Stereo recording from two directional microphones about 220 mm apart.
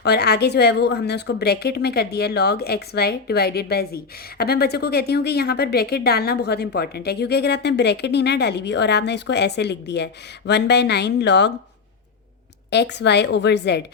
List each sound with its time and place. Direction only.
0.0 s speech: 50° left (ahead or behind)
12.7 s speech: 50° left (ahead or behind)